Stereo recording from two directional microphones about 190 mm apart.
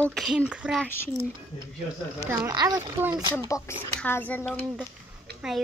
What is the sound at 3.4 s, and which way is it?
A child's voice, 15° left (ahead or behind).